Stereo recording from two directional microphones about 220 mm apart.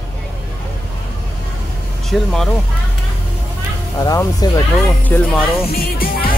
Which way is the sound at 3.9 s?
15° left (ahead or behind).